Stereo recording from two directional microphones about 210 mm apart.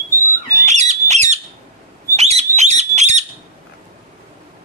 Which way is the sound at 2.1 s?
30° right (ahead or behind).